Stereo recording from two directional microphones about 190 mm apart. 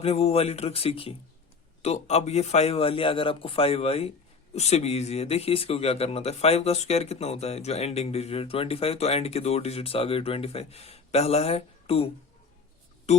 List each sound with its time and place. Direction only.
0.0 s speech: 35° left (ahead or behind)
13.1 s speech: 35° left (ahead or behind)